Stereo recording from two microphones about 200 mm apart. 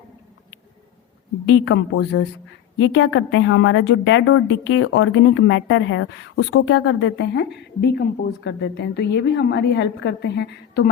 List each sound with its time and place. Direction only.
1.5 s a woman's voice: 75° left (ahead or behind); by 10.8 s 60° left (ahead or behind)